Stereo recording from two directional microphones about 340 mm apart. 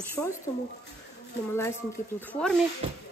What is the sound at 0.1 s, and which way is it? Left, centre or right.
Speech, centre.